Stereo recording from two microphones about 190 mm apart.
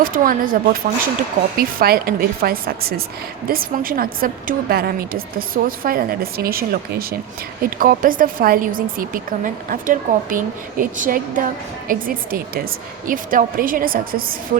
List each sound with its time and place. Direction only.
0.0 s a woman's voice: 50° right (ahead or behind)